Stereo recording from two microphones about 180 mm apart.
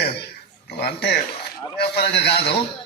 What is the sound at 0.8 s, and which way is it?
A man's voice, 65° left (ahead or behind).